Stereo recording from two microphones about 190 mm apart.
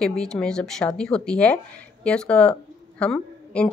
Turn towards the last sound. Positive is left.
turn(degrees=5)  # may be behind; listen again after turning